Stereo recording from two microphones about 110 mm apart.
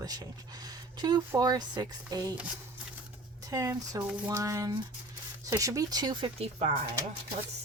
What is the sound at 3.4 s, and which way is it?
Speech, 30° right (ahead or behind).